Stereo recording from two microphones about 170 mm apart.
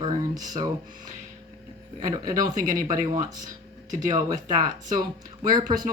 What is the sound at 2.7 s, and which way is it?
Speech, 20° right (ahead or behind).